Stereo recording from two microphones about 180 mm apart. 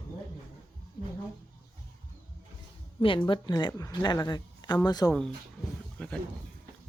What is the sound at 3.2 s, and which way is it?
Speech, 25° left (ahead or behind).